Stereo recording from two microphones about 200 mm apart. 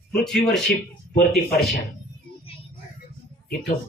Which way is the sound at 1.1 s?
50° left (ahead or behind).